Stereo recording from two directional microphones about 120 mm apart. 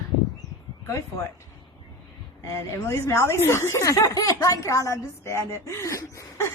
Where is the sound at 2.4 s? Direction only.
25° left (ahead or behind).